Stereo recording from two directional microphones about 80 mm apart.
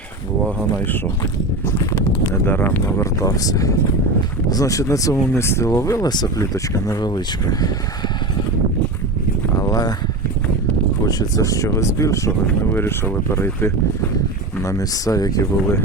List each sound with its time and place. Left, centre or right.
1.2 s speech: left
2.5 s speech: left
3.0 s speech: left
5.3 s speech: left
6.1 s speech: left
6.4 s speech: left
7.0 s speech: left
9.6 s a sound: left
11.0 s speech: left
12.7 s speech: left
14.7 s speech: left